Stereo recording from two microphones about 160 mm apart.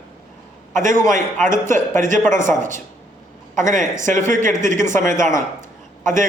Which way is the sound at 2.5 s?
50° right (ahead or behind).